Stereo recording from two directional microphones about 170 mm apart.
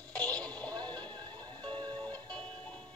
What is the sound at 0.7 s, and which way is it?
Music, 25° right (ahead or behind).